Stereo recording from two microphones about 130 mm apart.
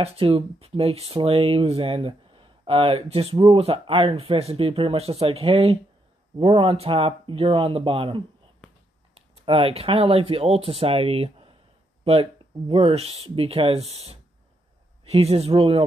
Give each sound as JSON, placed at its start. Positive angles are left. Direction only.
{"t": 0.0, "sound": "speech", "side_deg": -45}